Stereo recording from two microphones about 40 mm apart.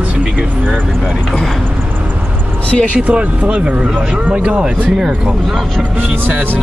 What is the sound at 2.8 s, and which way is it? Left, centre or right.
Speech, right.